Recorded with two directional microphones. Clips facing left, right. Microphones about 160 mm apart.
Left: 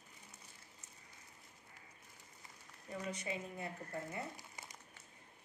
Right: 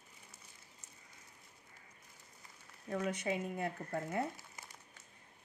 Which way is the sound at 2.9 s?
65° right (ahead or behind).